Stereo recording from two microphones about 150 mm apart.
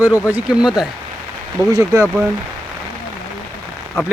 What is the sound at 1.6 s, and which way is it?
Speech, 25° right (ahead or behind).